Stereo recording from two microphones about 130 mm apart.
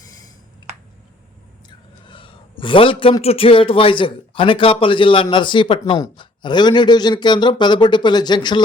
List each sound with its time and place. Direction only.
2.0 s a man's voice: 40° left (ahead or behind)